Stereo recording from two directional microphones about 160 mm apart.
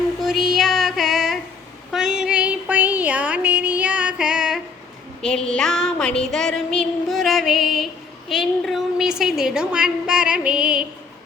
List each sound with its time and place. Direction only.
0.2 s child singing: centre (ahead or behind)
1.9 s a sound: 5° right (ahead or behind)
5.2 s a woman's voice: 5° left (ahead or behind)